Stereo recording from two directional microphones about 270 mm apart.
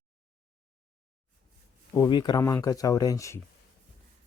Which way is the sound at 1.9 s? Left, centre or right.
Centre.